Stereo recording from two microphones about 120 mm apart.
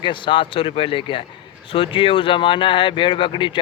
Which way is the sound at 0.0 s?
45° left (ahead or behind).